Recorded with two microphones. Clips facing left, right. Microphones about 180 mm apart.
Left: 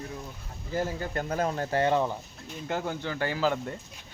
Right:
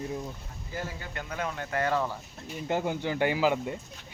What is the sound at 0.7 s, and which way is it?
Speech, 40° left (ahead or behind).